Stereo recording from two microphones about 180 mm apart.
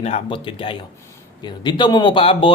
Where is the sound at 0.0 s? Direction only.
30° left (ahead or behind).